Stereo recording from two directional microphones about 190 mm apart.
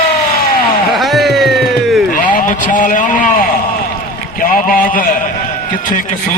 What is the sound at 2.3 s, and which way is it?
Vehicle, 45° left (ahead or behind).